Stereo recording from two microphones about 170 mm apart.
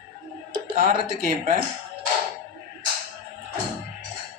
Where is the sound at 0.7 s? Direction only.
55° right (ahead or behind).